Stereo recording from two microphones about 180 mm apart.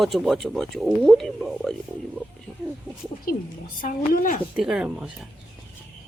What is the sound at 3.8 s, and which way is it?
Speech, 50° left (ahead or behind).